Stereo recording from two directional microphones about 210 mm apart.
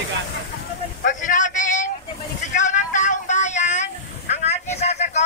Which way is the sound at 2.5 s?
35° left (ahead or behind).